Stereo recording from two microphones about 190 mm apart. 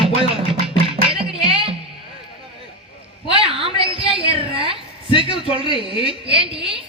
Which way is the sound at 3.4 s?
30° right (ahead or behind).